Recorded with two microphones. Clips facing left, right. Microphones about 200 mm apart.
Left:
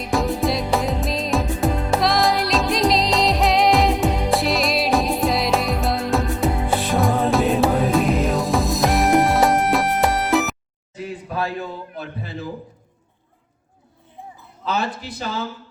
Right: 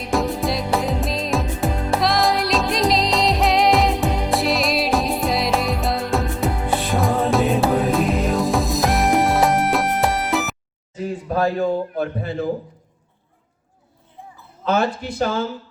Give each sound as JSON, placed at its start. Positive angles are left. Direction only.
{"t": 0.0, "sound": "music", "side_deg": 0}
{"t": 11.3, "sound": "a man's voice", "side_deg": -40}
{"t": 14.7, "sound": "speech", "side_deg": -50}